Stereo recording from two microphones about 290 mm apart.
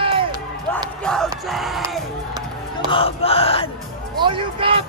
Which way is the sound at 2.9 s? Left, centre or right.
Centre.